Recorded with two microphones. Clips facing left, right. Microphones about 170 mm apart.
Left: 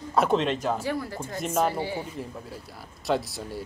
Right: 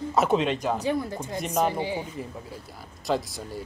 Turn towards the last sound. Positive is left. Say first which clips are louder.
# even
turn(degrees=0)  # may be behind; listen again after turning